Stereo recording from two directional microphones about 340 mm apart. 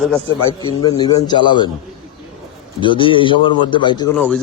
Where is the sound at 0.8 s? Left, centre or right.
Centre.